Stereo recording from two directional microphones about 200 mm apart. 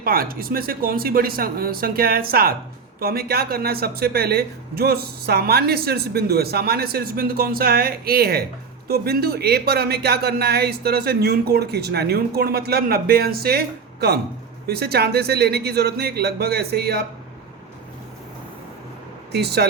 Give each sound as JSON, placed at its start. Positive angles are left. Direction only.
{"t": 0.0, "sound": "speech", "side_deg": -45}
{"t": 19.3, "sound": "speech", "side_deg": -55}